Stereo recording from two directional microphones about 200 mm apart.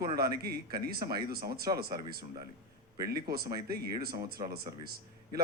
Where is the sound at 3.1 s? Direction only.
50° right (ahead or behind).